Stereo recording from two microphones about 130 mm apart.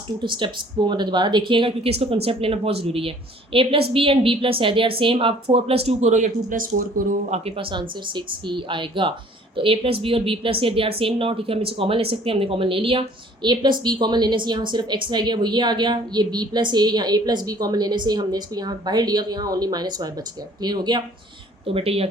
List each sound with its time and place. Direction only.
0.2 s a woman's voice: 40° right (ahead or behind)
21.7 s speech: 50° right (ahead or behind)